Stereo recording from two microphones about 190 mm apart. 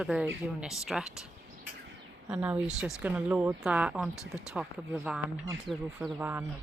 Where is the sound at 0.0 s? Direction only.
5° right (ahead or behind).